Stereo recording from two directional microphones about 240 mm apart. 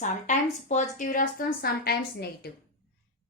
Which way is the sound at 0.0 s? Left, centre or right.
Left.